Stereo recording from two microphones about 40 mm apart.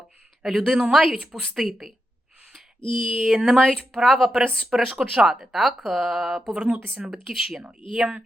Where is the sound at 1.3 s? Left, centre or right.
Centre.